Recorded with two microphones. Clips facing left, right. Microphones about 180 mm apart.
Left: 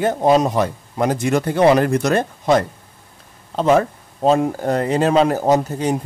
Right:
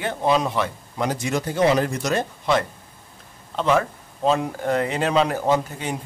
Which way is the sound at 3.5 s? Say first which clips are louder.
Left 5 dB; 40° left (ahead or behind).